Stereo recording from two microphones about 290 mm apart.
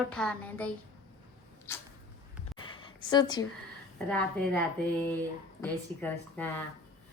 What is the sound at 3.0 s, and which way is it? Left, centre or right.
Speech, centre.